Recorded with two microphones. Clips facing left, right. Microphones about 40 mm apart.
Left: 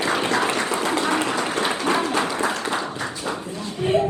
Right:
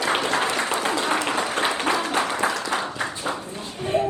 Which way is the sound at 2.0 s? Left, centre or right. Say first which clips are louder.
Left 1 dB; right.